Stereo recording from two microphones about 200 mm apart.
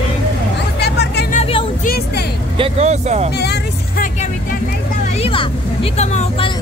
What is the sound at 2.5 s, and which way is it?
Speech, 30° right (ahead or behind).